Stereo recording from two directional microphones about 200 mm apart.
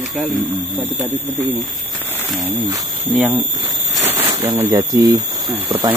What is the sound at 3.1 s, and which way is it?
Speech, 10° right (ahead or behind).